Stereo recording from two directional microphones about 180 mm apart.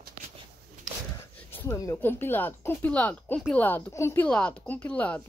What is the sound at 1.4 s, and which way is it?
Speech, 15° left (ahead or behind).